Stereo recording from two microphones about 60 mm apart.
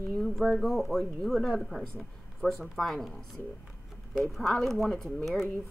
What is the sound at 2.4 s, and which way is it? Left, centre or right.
Speech, left.